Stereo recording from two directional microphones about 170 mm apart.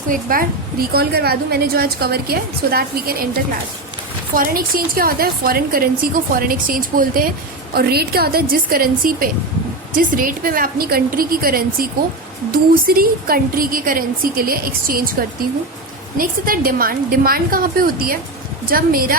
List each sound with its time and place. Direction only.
0.1 s speech: 55° right (ahead or behind)
4.4 s speech: 60° right (ahead or behind)
16.1 s speech: 55° right (ahead or behind)